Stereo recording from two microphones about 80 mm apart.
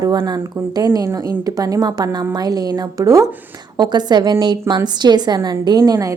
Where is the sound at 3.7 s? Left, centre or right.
Right.